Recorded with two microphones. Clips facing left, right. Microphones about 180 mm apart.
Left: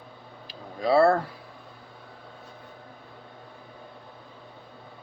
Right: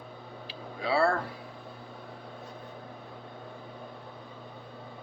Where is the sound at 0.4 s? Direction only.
40° left (ahead or behind).